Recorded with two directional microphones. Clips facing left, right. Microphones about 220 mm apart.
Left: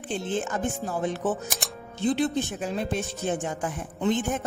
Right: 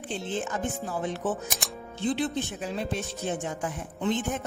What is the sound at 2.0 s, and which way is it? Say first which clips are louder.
A woman's voice: left 3 dB; 45° left (ahead or behind).